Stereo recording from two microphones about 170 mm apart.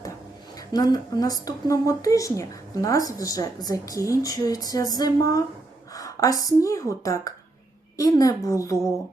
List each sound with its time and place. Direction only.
0.7 s speech: 25° left (ahead or behind)